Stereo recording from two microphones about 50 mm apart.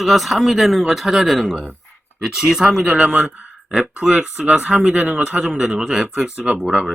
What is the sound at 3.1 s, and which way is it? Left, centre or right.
Speech, right.